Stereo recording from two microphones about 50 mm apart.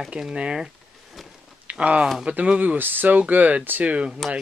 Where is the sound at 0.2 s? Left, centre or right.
Centre.